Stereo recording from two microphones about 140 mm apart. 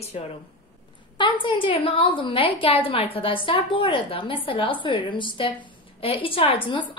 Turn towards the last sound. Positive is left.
turn(degrees=40)  # may be behind; listen again after turning